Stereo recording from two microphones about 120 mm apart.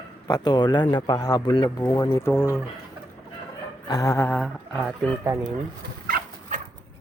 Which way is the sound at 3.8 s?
30° left (ahead or behind).